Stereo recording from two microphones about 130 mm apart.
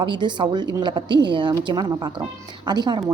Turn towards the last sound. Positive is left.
turn(degrees=-30)  # may be behind; listen again after turning